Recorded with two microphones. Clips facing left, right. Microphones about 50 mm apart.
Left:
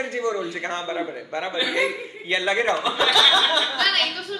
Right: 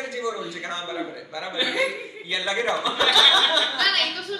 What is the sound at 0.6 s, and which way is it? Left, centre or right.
Speech, left.